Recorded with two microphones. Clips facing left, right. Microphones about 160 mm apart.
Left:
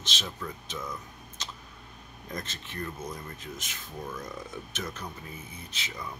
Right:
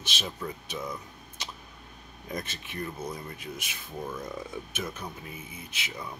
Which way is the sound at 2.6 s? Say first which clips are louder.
Right 2 dB; 10° right (ahead or behind).